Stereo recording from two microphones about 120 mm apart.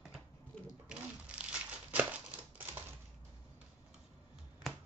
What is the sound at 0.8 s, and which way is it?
Crumpling, 10° right (ahead or behind).